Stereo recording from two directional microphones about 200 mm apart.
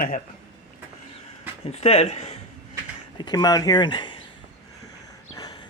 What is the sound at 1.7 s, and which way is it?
Speech, 30° left (ahead or behind).